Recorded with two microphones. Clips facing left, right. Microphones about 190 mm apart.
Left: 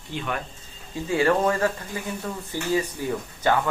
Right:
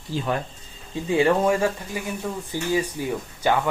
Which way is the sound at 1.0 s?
15° right (ahead or behind).